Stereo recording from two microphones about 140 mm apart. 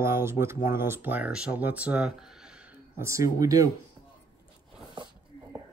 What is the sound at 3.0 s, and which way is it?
Speech, 20° right (ahead or behind).